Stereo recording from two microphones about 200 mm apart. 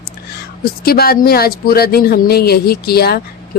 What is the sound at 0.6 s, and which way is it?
A woman's voice, 50° left (ahead or behind).